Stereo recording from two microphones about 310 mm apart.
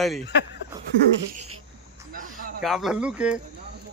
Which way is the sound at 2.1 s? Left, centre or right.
Right.